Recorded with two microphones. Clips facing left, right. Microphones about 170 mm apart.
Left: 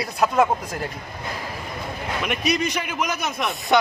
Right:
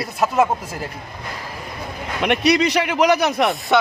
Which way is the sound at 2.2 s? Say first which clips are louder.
Right 7 dB; 70° right (ahead or behind).